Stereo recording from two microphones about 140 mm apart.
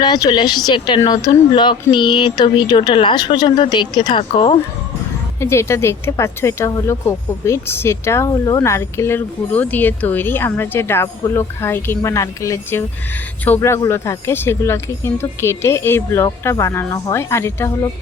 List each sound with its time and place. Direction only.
0.0 s speech: 30° left (ahead or behind)
5.4 s speech: 20° left (ahead or behind)